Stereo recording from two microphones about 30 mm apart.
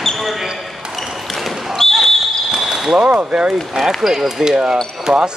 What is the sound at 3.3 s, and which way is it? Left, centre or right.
Speech, centre.